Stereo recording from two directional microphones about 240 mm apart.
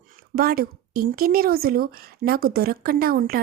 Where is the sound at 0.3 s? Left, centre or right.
Right.